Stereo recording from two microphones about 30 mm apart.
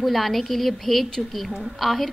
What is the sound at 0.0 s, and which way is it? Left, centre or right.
A woman's voice, centre.